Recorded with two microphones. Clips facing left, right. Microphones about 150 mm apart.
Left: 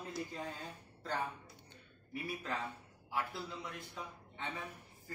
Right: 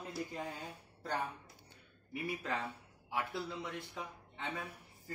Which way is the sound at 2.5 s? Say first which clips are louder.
Right 1 dB; 15° right (ahead or behind).